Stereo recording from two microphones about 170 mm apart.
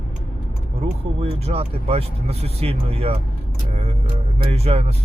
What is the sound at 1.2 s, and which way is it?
Speech, 35° right (ahead or behind).